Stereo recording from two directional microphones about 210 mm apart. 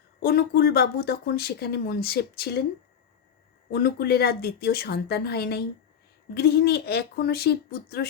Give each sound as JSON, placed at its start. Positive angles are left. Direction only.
{"t": 0.2, "sound": "speech", "side_deg": 45}
{"t": 3.7, "sound": "speech", "side_deg": 50}